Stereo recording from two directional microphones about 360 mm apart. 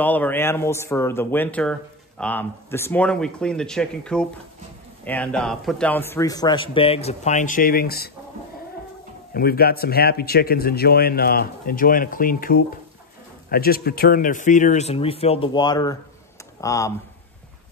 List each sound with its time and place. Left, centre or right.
0.0 s a man's voice: centre; by 8.1 s left
9.3 s a man's voice: left; by 16.9 s centre